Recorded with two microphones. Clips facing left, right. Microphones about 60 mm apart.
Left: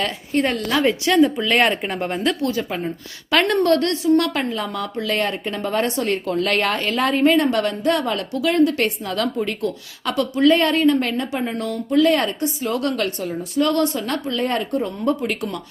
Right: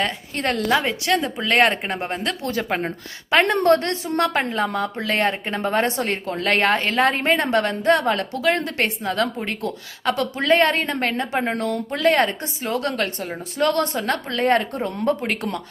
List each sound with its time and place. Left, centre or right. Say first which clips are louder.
0.9 s a woman's voice: left 6 dB; centre
2.5 s a woman's voice: even; right
3.2 s a woman's voice: even; right